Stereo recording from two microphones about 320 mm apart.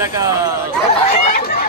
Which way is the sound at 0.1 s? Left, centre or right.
Centre.